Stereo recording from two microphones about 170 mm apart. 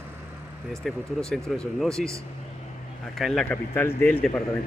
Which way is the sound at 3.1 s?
Centre (ahead or behind).